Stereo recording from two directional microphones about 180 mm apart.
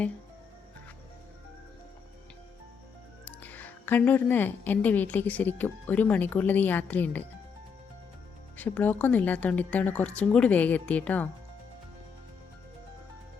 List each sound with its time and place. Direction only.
3.2 s speech: 10° left (ahead or behind)
8.5 s speech: 10° left (ahead or behind)